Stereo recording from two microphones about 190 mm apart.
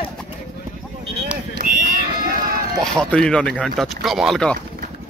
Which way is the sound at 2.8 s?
5° left (ahead or behind).